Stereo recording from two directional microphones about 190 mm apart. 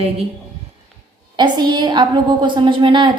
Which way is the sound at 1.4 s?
25° right (ahead or behind).